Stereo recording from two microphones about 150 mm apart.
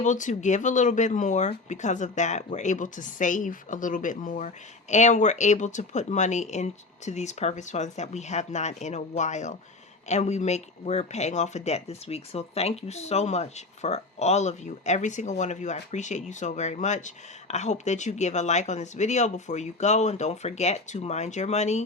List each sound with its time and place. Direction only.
0.0 s speech: 55° left (ahead or behind)